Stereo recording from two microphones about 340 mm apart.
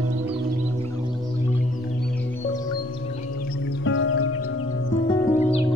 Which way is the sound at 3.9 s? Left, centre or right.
Left.